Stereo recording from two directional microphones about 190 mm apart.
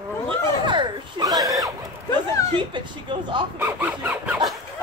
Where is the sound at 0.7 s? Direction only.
25° right (ahead or behind).